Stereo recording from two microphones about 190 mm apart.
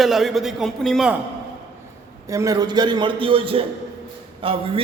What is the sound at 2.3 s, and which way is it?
A man's voice, 20° right (ahead or behind).